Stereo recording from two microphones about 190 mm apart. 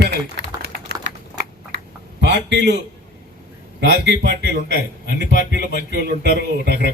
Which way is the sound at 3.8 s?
65° right (ahead or behind).